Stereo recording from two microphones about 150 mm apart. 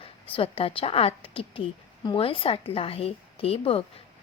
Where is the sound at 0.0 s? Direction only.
40° left (ahead or behind).